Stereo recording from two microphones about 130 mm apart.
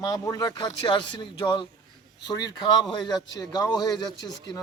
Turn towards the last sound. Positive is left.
turn(degrees=35)  # may be behind; listen again after turning